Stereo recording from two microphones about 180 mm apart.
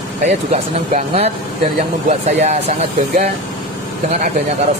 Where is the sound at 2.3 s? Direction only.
40° right (ahead or behind).